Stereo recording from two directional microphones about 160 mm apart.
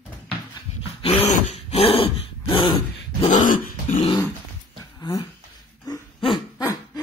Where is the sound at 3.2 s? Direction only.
55° left (ahead or behind).